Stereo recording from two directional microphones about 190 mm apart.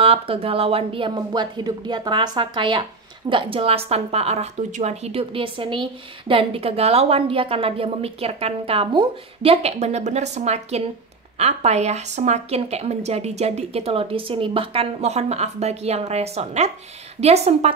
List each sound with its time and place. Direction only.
0.0 s speech: 30° right (ahead or behind)